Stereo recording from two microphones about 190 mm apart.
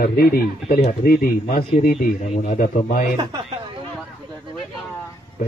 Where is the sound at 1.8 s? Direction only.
35° left (ahead or behind).